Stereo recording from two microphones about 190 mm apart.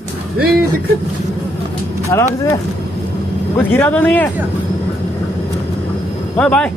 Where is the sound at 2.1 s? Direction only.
15° left (ahead or behind).